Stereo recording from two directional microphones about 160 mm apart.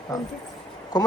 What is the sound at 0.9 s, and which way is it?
Speech, 25° left (ahead or behind).